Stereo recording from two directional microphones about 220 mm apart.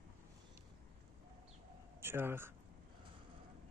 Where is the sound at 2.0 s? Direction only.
10° right (ahead or behind).